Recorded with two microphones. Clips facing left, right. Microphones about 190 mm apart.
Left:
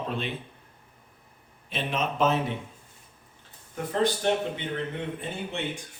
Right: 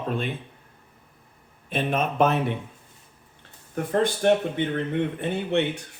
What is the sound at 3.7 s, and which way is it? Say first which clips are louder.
Speech: right 3 dB; 55° right (ahead or behind).